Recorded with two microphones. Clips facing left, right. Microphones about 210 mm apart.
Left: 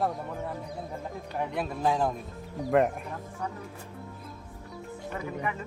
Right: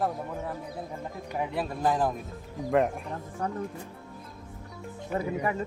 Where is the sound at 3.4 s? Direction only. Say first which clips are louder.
Right 4 dB; 55° right (ahead or behind).